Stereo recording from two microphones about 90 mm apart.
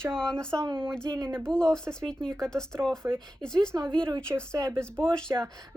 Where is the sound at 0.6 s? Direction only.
60° right (ahead or behind).